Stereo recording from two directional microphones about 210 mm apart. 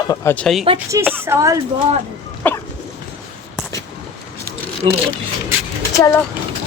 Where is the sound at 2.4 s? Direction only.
10° left (ahead or behind).